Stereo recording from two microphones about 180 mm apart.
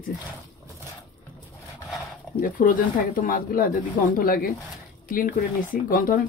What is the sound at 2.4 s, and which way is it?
Speech, 45° left (ahead or behind).